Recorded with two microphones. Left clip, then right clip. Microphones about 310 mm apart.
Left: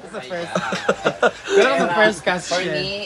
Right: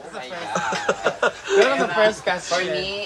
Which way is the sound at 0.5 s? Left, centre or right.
Centre.